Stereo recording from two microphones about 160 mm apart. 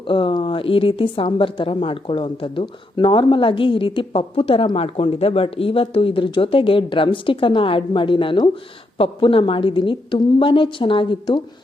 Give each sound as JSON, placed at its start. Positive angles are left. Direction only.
{"t": 0.1, "sound": "a woman's voice", "side_deg": 30}